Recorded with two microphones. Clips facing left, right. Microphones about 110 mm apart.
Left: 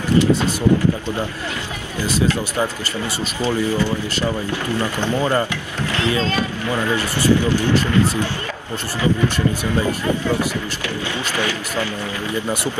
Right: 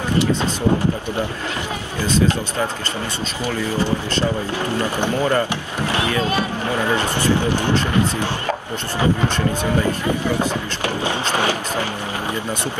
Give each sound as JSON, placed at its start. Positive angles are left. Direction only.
{"t": 4.7, "sound": "speech", "side_deg": -15}